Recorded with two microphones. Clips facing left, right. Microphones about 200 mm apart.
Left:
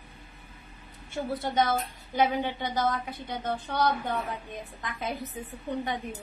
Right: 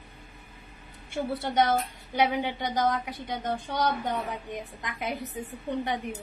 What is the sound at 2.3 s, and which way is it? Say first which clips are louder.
A woman's voice: right 1 dB; 15° right (ahead or behind).